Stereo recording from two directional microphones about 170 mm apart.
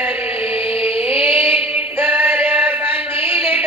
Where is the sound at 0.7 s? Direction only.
35° left (ahead or behind).